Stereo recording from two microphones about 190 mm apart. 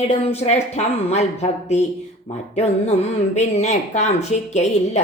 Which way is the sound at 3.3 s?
35° left (ahead or behind).